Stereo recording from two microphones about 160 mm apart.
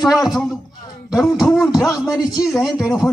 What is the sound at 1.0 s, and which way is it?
A man's voice, 20° left (ahead or behind).